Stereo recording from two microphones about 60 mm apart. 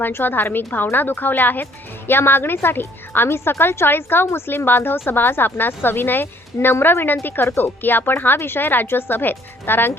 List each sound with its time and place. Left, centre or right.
0.0 s a woman's voice: left